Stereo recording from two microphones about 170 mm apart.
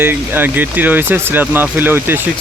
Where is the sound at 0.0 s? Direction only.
10° right (ahead or behind).